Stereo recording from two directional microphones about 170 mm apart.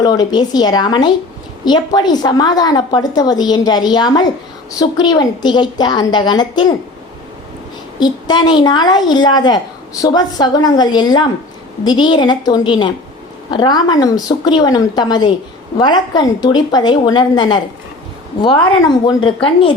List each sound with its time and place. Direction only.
0.0 s a woman's voice: 25° left (ahead or behind)
7.9 s a woman's voice: 25° left (ahead or behind)